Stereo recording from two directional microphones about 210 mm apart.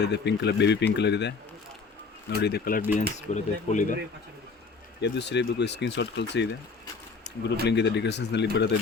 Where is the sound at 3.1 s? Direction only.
35° left (ahead or behind).